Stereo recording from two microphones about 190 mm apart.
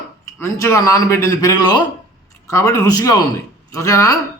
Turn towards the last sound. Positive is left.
turn(degrees=15)  # may be behind; listen again after turning